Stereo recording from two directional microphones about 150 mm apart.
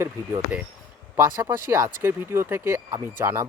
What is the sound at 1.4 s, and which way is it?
Speech, 15° right (ahead or behind).